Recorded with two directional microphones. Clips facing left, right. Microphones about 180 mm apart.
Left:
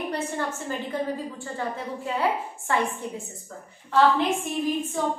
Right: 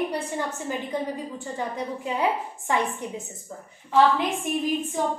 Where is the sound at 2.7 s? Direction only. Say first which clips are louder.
Even; 15° right (ahead or behind).